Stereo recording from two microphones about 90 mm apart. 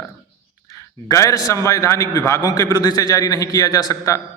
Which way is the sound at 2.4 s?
50° left (ahead or behind).